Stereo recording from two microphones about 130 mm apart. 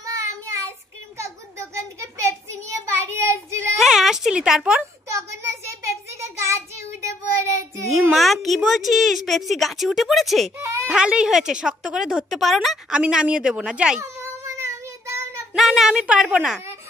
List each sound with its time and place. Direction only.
0.0 s child singing: 25° right (ahead or behind)
3.7 s a sound: centre (ahead or behind)
5.1 s child singing: 20° right (ahead or behind)
8.1 s a woman's voice: centre (ahead or behind)
10.6 s baby cry: 20° right (ahead or behind)
10.9 s a woman's voice: 5° right (ahead or behind)
14.0 s child singing: 20° right (ahead or behind)
15.5 s a woman's voice: 5° right (ahead or behind)